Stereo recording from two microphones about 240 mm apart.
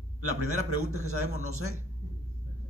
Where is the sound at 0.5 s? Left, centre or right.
Right.